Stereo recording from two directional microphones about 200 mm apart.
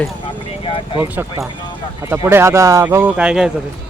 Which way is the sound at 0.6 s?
25° left (ahead or behind).